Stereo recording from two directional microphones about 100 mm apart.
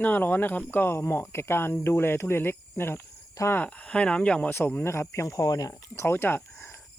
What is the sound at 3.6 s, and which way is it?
Speech, 15° left (ahead or behind).